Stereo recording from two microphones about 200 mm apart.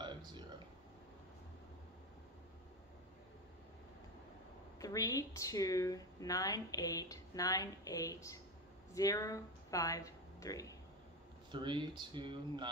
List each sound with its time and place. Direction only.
0.0 s a sound: 20° right (ahead or behind)
4.7 s speech: 15° left (ahead or behind)
11.5 s speech: 25° right (ahead or behind)